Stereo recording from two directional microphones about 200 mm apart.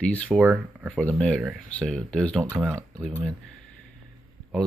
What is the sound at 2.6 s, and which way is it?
Speech, 15° right (ahead or behind).